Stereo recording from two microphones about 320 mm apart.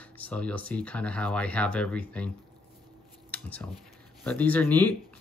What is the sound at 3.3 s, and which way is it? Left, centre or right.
Speech, centre.